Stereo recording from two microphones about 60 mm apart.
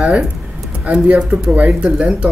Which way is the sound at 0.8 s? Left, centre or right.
Centre.